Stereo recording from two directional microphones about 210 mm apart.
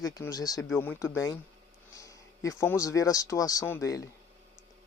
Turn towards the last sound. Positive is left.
turn(degrees=15)  # may be behind; listen again after turning